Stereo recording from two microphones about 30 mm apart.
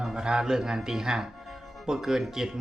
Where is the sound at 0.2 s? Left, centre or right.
Right.